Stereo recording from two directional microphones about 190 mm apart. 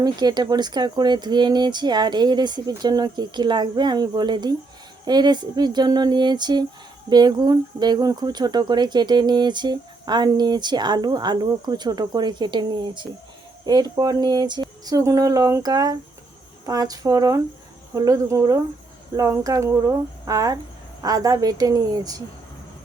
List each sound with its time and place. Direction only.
0.0 s speech: 20° right (ahead or behind)